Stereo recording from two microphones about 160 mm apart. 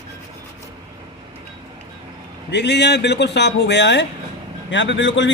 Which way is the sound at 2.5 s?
90° left.